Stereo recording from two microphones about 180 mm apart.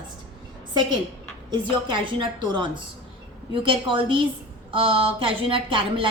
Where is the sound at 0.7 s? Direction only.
25° right (ahead or behind).